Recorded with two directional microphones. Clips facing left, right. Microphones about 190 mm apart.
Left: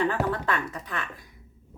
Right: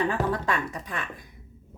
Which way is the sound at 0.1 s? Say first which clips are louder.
Even; 15° right (ahead or behind).